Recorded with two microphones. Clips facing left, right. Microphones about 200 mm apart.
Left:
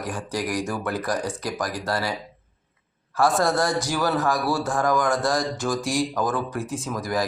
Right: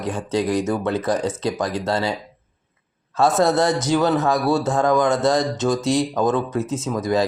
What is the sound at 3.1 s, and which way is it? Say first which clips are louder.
Speech: right 4 dB; 20° right (ahead or behind).